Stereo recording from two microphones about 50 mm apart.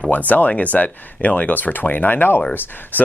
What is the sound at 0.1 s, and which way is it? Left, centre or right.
Speech, left.